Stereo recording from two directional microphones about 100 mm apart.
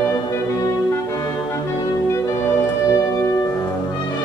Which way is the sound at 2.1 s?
25° left (ahead or behind).